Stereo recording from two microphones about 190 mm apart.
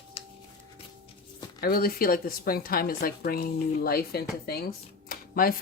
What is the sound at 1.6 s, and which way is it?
A woman's voice, 50° left (ahead or behind).